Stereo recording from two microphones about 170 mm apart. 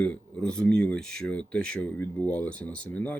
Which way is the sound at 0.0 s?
5° left (ahead or behind).